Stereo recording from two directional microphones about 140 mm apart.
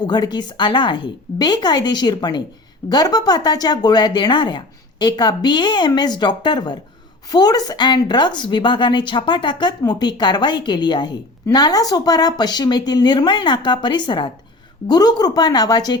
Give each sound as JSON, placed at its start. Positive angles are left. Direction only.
{"t": 0.0, "sound": "a woman's voice", "side_deg": 30}